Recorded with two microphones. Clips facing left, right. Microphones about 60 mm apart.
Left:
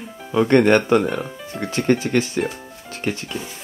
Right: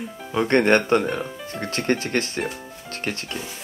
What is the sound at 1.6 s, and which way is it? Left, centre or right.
Speech, right.